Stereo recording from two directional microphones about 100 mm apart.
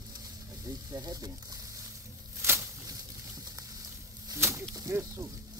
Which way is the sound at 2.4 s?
30° right (ahead or behind).